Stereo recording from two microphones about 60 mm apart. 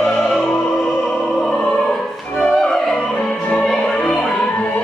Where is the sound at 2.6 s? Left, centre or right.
Centre.